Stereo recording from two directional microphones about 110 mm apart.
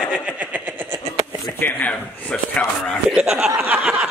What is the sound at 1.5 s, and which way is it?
Speech, 15° left (ahead or behind).